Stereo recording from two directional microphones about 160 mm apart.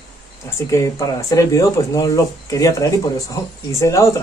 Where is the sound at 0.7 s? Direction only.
20° left (ahead or behind).